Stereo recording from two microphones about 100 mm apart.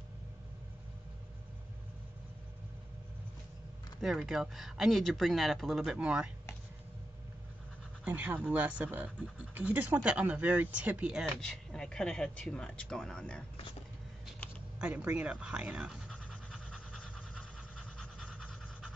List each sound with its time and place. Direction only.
4.0 s speech: centre (ahead or behind)
8.0 s speech: 15° right (ahead or behind)
11.4 s speech: 5° left (ahead or behind)
14.4 s typing: 15° left (ahead or behind)
14.8 s speech: 15° right (ahead or behind)
16.3 s pant: 10° left (ahead or behind)